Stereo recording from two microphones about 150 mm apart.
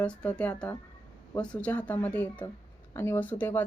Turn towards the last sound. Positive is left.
turn(degrees=10)  # may be behind; listen again after turning